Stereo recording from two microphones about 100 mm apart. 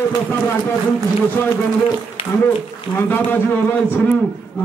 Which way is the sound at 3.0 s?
20° left (ahead or behind).